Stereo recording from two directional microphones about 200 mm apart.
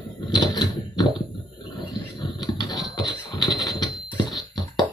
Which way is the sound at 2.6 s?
20° left (ahead or behind).